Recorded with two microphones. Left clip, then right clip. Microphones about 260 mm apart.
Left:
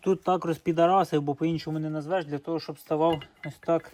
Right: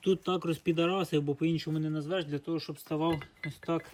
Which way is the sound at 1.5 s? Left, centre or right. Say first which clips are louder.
Left 2 dB; centre.